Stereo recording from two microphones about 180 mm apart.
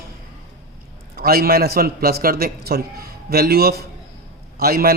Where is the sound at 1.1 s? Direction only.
55° right (ahead or behind).